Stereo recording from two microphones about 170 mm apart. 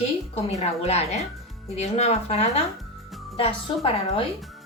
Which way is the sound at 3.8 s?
35° left (ahead or behind).